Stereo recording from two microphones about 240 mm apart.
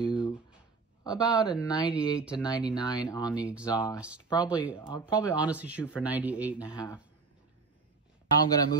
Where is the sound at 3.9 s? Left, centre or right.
Centre.